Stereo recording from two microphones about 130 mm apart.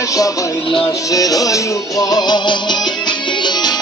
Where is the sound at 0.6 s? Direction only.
40° left (ahead or behind).